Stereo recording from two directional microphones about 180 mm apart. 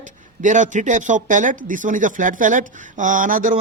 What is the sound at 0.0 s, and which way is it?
Speech, 45° right (ahead or behind).